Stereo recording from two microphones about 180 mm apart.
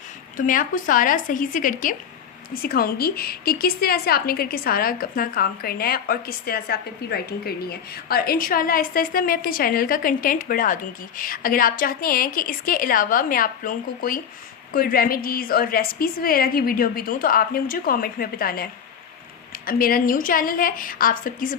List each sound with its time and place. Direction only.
0.3 s a woman's voice: 50° left (ahead or behind)